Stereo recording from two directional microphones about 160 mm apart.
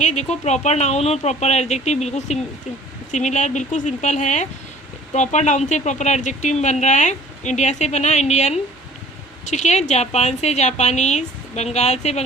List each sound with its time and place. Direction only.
0.0 s speech: 45° left (ahead or behind)